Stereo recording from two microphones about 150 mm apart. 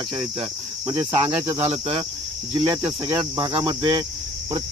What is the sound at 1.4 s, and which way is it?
Cricket, 15° right (ahead or behind).